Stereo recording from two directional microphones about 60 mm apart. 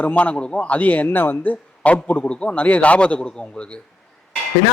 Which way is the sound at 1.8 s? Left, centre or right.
Left.